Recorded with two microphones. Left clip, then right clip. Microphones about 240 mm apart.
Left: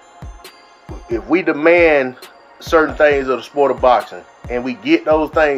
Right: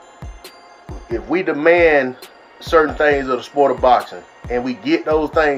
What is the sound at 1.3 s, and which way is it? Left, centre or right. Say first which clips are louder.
Speech: left 2 dB; centre.